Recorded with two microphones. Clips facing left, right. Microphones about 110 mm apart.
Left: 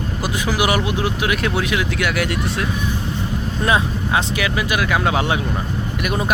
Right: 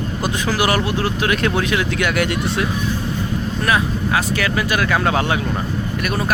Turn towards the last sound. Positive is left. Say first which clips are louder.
# even
turn(degrees=20)  # may be behind; listen again after turning